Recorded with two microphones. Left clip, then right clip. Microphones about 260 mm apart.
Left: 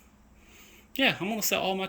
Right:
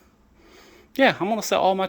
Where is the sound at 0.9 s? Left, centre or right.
Centre.